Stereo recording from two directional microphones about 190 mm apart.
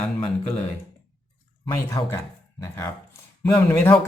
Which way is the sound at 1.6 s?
15° left (ahead or behind).